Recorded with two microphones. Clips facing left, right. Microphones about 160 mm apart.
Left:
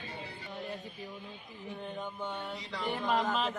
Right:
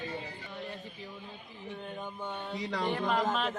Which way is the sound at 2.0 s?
10° right (ahead or behind).